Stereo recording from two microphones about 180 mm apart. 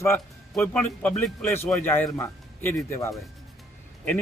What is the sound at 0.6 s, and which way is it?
A man's voice, 5° left (ahead or behind).